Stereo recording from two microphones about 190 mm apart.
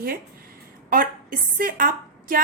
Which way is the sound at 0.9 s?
45° right (ahead or behind).